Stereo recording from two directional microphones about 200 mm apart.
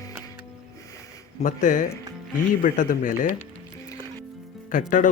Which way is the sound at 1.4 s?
40° left (ahead or behind).